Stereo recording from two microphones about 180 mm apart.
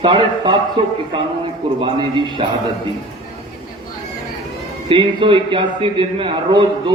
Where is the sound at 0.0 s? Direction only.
25° right (ahead or behind).